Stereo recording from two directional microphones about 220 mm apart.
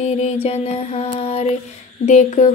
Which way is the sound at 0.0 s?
30° left (ahead or behind).